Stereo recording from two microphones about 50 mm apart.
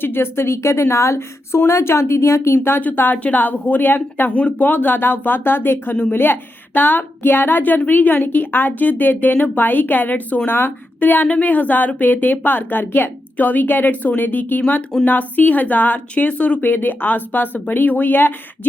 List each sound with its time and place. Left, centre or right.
0.0 s a woman's voice: left
2.8 s speech: left
4.3 s speech: left